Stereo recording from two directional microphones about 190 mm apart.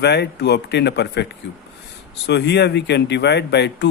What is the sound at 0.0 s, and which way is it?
A man's voice, 60° left (ahead or behind).